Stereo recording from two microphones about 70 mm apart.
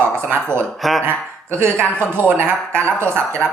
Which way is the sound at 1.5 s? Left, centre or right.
Right.